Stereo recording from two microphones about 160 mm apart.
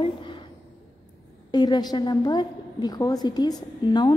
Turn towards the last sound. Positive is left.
turn(degrees=30)  # may be behind; listen again after turning